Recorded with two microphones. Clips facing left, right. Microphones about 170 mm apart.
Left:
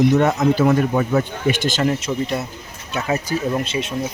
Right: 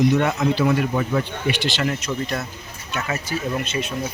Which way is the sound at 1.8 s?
25° left (ahead or behind).